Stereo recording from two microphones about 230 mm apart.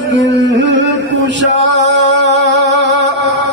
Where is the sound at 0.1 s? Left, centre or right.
Right.